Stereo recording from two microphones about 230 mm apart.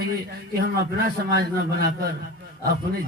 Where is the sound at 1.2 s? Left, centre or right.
Right.